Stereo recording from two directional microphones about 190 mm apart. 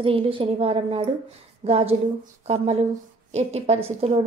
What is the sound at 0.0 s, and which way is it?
A woman's voice, 30° right (ahead or behind).